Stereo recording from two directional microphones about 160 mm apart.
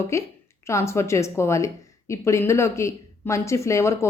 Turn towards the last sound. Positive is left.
turn(degrees=20)  # may be behind; listen again after turning